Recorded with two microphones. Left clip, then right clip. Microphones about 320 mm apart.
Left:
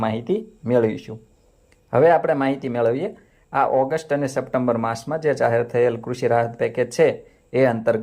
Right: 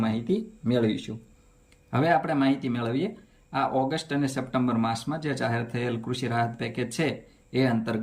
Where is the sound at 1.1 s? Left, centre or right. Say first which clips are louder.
Left 4 dB; left.